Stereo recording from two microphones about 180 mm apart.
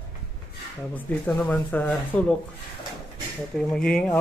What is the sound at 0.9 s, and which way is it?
A woman's voice, 10° left (ahead or behind).